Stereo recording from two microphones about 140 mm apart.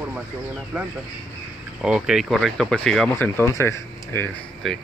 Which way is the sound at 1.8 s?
5° right (ahead or behind).